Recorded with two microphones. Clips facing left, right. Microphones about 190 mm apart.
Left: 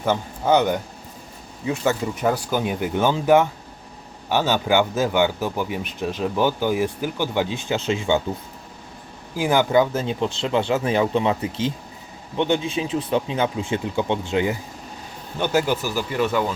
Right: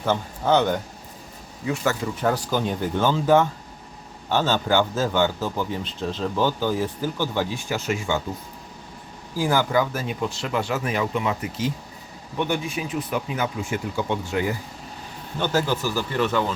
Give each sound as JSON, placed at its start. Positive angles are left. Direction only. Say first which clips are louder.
{"t": 0.0, "sound": "a man's voice", "louder": "left 1 dB", "side_deg": 15}
{"t": 9.3, "sound": "speech", "louder": "left 3 dB", "side_deg": 20}